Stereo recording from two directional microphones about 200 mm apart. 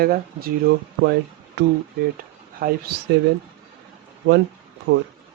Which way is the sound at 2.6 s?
50° right (ahead or behind).